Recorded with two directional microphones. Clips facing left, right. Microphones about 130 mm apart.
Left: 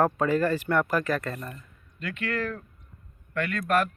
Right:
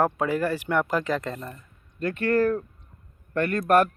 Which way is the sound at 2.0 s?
40° right (ahead or behind).